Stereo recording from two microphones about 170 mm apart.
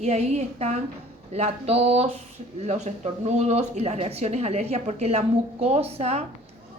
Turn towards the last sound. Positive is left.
turn(degrees=-40)  # may be behind; listen again after turning